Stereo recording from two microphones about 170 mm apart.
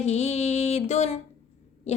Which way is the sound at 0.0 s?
40° left (ahead or behind).